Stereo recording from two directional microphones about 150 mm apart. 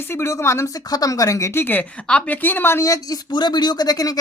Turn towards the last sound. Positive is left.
turn(degrees=25)  # may be behind; listen again after turning